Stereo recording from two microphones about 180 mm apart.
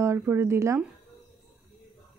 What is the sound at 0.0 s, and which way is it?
Speech, 15° right (ahead or behind).